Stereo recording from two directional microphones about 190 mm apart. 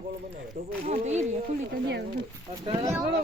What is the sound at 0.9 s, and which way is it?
Speech, 35° right (ahead or behind).